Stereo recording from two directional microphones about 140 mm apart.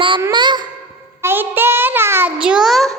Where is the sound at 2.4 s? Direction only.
5° right (ahead or behind).